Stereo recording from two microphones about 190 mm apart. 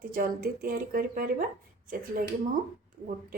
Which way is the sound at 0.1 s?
50° right (ahead or behind).